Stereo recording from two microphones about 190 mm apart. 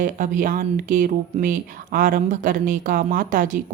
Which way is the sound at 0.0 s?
45° right (ahead or behind).